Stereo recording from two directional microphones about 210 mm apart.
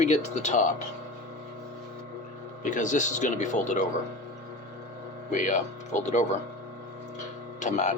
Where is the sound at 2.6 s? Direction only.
35° left (ahead or behind).